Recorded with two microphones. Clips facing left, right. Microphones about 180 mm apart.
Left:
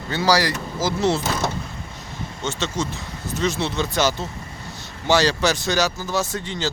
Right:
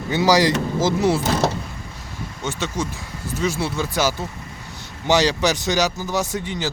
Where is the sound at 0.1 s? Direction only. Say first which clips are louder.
Right 3 dB; 15° right (ahead or behind).